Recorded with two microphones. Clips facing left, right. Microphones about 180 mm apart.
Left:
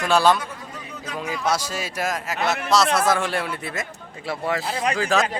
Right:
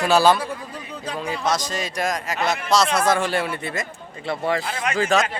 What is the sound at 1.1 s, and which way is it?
Speech, 10° left (ahead or behind).